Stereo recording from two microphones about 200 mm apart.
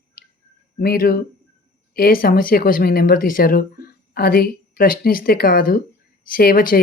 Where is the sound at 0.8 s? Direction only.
50° left (ahead or behind).